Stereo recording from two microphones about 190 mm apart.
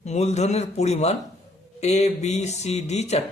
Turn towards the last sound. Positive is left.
turn(degrees=35)  # may be behind; listen again after turning